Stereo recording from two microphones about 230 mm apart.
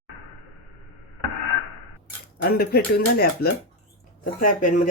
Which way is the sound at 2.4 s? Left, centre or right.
Left.